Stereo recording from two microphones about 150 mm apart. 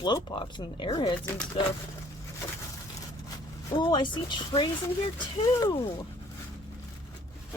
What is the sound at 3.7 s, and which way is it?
Speech, 30° left (ahead or behind).